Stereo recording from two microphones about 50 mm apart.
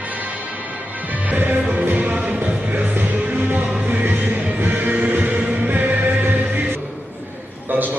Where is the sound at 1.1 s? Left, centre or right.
Right.